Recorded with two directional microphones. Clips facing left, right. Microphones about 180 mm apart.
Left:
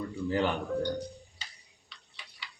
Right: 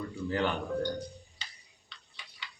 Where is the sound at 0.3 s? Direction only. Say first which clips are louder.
Left 2 dB; 15° left (ahead or behind).